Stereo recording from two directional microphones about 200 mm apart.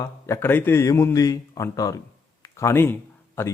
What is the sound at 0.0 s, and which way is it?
Speech, 15° left (ahead or behind).